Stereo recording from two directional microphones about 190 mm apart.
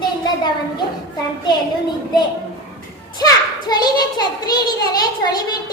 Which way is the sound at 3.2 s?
20° left (ahead or behind).